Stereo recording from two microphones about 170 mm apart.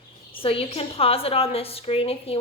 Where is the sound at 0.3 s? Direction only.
30° left (ahead or behind).